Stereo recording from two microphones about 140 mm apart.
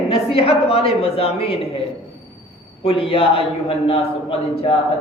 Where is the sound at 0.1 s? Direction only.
40° left (ahead or behind).